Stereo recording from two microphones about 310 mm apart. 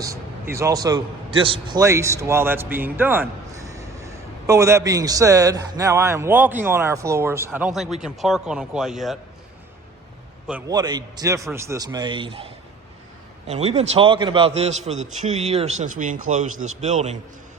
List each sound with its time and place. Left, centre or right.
0.0 s a man's voice: centre
10.4 s a man's voice: centre
13.5 s a man's voice: right